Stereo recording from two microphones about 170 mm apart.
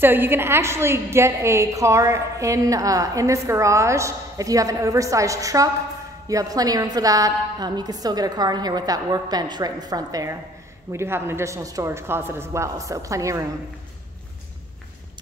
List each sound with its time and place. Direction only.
0.0 s a woman's voice: 10° right (ahead or behind)